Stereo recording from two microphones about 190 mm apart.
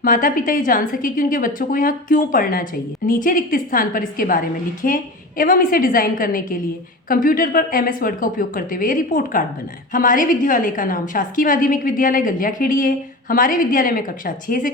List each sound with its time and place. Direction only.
0.0 s a woman's voice: 45° left (ahead or behind)